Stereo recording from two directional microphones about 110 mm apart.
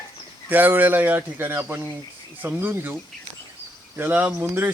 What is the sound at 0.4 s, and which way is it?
Speech, 15° right (ahead or behind).